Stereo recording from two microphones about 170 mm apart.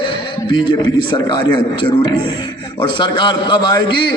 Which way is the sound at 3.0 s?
25° left (ahead or behind).